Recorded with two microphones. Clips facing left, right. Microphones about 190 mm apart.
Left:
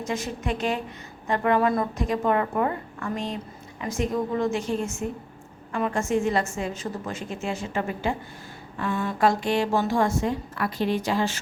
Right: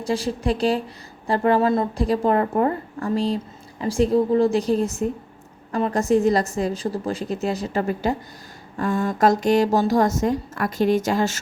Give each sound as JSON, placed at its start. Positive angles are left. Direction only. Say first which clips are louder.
{"t": 0.0, "sound": "a woman's voice", "louder": "right 6 dB", "side_deg": -35}